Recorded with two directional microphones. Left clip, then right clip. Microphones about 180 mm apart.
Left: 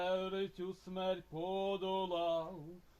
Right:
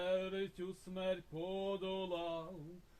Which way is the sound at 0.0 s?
15° right (ahead or behind).